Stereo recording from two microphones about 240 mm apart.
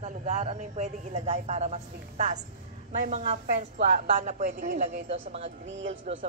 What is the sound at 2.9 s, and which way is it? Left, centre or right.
A woman's voice, right.